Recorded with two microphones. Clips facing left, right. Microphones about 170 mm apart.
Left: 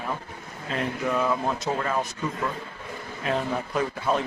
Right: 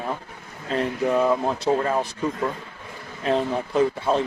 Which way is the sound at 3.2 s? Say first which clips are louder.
Right 4 dB; 30° right (ahead or behind).